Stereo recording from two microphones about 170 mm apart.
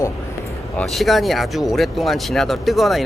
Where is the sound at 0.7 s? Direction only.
Centre (ahead or behind).